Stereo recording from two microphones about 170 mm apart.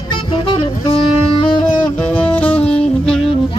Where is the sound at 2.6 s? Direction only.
5° left (ahead or behind).